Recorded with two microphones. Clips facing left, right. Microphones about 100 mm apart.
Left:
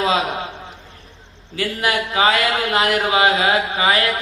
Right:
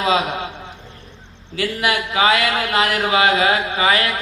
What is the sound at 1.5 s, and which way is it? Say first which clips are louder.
A man's voice: even; 35° left (ahead or behind).